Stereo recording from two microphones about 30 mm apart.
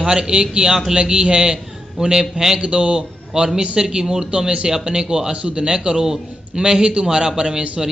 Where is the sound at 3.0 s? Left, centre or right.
Right.